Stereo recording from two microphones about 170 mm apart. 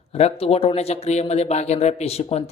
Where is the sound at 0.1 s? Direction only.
35° left (ahead or behind).